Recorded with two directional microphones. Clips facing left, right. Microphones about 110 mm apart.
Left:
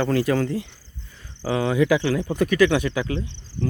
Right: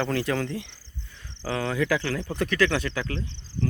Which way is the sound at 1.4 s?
10° left (ahead or behind).